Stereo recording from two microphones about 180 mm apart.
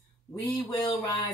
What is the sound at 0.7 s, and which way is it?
Speech, 25° left (ahead or behind).